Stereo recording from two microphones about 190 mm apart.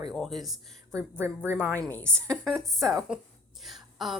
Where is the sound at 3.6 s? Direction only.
Centre (ahead or behind).